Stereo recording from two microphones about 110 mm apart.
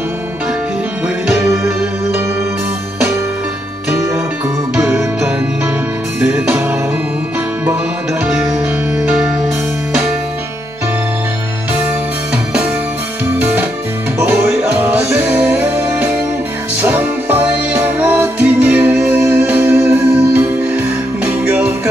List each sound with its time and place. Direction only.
6.2 s music: 15° right (ahead or behind)
14.9 s music: 10° right (ahead or behind)